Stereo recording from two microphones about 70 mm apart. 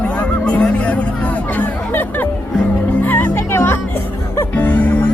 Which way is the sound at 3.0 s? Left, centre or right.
Left.